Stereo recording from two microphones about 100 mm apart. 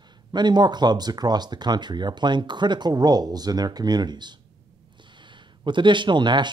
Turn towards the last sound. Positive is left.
turn(degrees=-50)  # may be behind; listen again after turning